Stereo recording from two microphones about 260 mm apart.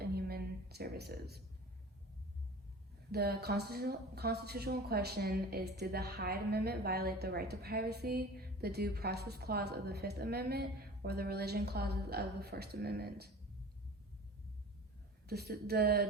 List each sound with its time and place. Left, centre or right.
0.0 s a sound: right
3.1 s a woman's voice: right
15.3 s a woman's voice: right